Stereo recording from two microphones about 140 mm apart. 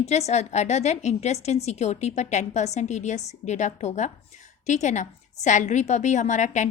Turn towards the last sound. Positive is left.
turn(degrees=60)  # may be behind; listen again after turning